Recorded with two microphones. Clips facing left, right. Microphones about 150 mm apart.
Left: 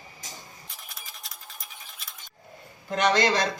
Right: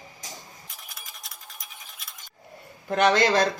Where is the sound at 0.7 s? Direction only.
Centre (ahead or behind).